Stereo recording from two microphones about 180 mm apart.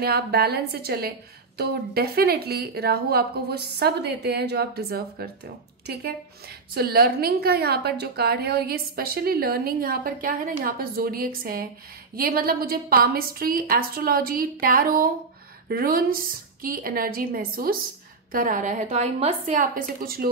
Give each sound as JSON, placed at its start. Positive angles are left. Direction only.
{"t": 0.0, "sound": "a woman's voice", "side_deg": -60}